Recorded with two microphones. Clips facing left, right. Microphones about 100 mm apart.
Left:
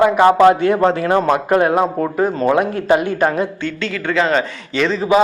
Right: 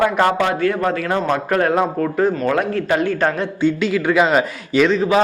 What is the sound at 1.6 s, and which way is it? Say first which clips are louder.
A man's voice: left 2 dB; 10° left (ahead or behind).